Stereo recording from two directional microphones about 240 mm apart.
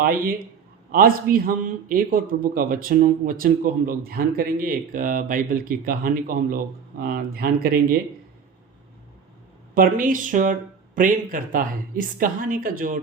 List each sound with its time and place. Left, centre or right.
0.0 s a man's voice: right
9.7 s a man's voice: right